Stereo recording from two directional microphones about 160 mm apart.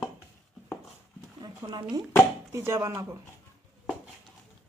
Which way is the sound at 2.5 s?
20° right (ahead or behind).